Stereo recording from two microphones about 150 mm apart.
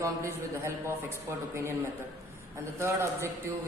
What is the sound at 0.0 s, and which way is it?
A man's voice, 20° right (ahead or behind).